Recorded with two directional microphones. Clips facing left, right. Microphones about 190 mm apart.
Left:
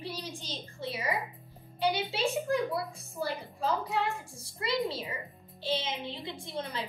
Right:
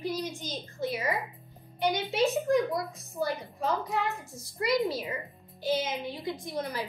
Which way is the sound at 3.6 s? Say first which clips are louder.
Even; 30° left (ahead or behind).